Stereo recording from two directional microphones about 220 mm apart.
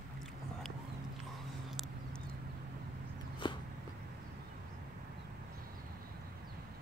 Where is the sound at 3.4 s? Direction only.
20° left (ahead or behind).